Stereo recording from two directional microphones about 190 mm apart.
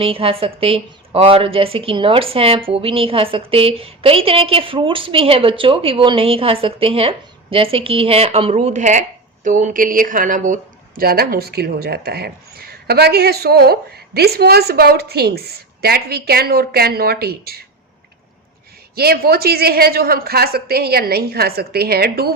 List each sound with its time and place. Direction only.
0.0 s a woman's voice: 30° right (ahead or behind)
11.0 s speech: 55° right (ahead or behind)
18.9 s speech: 55° right (ahead or behind)